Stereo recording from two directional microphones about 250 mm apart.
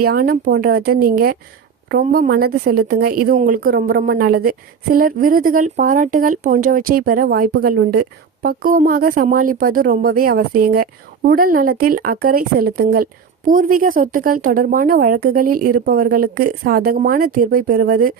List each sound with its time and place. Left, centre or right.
0.0 s a woman's voice: right